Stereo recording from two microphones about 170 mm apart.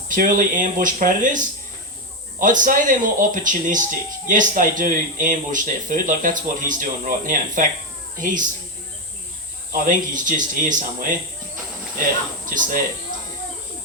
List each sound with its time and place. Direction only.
0.1 s speech: 50° right (ahead or behind)
2.4 s speech: 50° right (ahead or behind)
9.7 s speech: 50° right (ahead or behind)
12.5 s speech: 50° right (ahead or behind)